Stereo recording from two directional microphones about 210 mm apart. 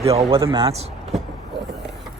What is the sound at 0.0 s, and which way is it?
Speech, 30° right (ahead or behind).